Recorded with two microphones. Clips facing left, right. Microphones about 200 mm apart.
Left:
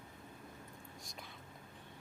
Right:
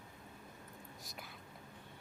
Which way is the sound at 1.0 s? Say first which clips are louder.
Right 1 dB; 5° right (ahead or behind).